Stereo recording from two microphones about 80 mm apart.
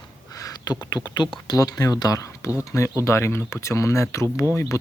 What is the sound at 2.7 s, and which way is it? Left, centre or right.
Speech, left.